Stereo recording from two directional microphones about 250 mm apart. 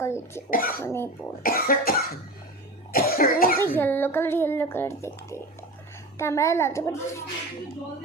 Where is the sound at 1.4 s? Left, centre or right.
Left.